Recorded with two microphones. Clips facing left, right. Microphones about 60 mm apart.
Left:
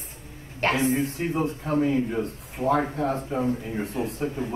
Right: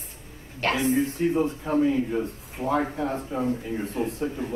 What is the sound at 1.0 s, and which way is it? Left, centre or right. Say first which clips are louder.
Speech: right 3 dB; left.